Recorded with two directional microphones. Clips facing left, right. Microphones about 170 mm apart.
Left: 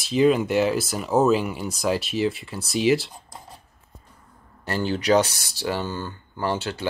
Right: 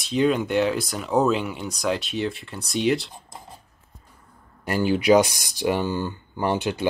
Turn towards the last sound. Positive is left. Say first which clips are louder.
# right 3 dB
turn(degrees=-15)  # may be behind; listen again after turning